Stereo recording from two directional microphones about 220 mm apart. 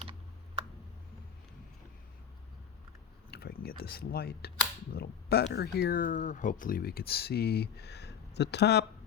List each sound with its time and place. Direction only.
3.3 s speech: 45° left (ahead or behind)